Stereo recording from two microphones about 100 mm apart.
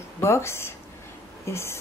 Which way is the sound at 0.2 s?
25° left (ahead or behind).